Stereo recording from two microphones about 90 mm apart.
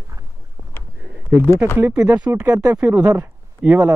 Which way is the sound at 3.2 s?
20° right (ahead or behind).